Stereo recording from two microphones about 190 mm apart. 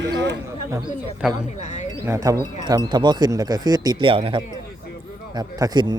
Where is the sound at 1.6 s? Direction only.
35° left (ahead or behind).